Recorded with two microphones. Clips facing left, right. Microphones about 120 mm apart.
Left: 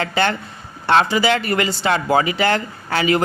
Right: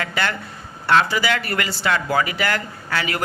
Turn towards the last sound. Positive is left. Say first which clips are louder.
# left 7 dB
turn(degrees=25)  # may be behind; listen again after turning